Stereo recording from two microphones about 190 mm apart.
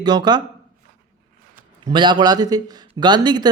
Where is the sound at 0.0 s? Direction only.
20° right (ahead or behind).